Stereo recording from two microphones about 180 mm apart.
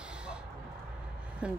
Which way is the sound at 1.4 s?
5° right (ahead or behind).